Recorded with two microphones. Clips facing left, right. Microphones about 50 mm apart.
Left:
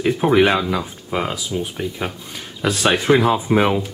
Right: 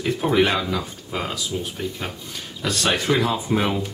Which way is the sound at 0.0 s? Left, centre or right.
Centre.